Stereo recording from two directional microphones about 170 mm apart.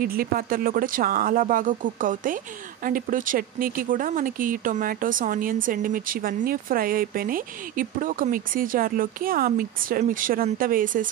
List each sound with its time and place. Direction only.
0.0 s speech: 60° right (ahead or behind)